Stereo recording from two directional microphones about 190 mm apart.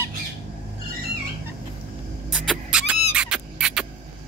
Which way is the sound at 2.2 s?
Centre (ahead or behind).